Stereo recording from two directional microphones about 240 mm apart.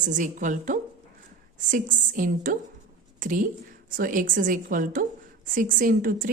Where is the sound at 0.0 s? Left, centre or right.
Right.